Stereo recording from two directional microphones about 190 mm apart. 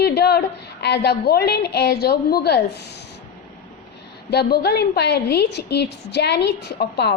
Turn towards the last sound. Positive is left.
turn(degrees=60)  # may be behind; listen again after turning